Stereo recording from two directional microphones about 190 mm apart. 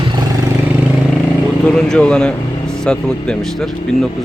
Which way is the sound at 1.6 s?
5° left (ahead or behind).